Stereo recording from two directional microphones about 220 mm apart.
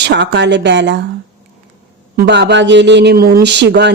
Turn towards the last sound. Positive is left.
turn(degrees=-50)  # may be behind; listen again after turning